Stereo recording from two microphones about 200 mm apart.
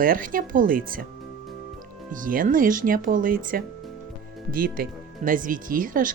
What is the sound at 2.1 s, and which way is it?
Speech, 45° right (ahead or behind).